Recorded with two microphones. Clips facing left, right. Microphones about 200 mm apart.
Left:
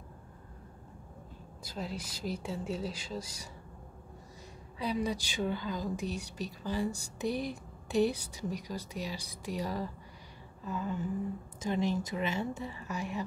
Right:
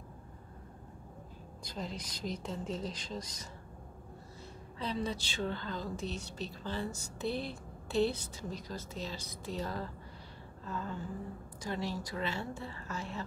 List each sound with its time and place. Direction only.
1.6 s a woman's voice: 5° left (ahead or behind)
4.7 s a woman's voice: 10° left (ahead or behind)